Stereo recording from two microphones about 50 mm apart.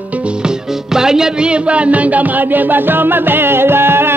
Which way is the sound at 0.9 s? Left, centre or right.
Centre.